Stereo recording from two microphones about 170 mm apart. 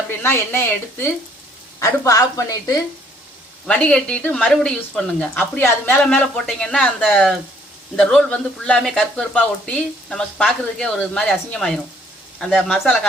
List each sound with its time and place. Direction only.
0.2 s a woman's voice: 15° left (ahead or behind)
3.7 s speech: 5° left (ahead or behind)